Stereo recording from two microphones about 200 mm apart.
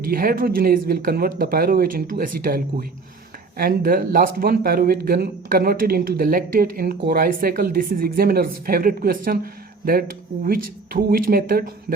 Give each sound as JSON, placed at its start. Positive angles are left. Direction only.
{"t": 0.0, "sound": "speech", "side_deg": -45}